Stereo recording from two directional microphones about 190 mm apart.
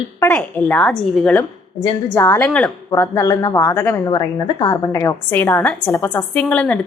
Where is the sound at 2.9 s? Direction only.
15° left (ahead or behind).